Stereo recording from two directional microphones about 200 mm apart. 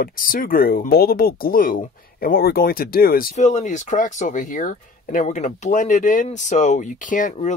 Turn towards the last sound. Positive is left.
turn(degrees=40)  # may be behind; listen again after turning